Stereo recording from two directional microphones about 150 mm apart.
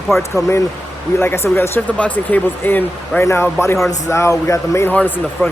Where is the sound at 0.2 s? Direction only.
20° left (ahead or behind).